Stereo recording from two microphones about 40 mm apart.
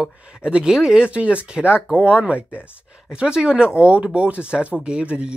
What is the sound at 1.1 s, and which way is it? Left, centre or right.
Speech, right.